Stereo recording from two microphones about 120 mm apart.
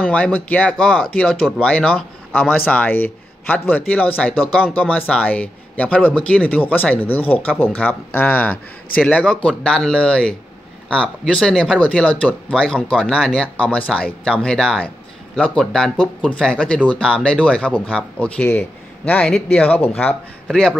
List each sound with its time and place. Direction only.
0.1 s speech: 10° left (ahead or behind)
19.2 s speech: 5° left (ahead or behind)
19.6 s a man's voice: 15° left (ahead or behind)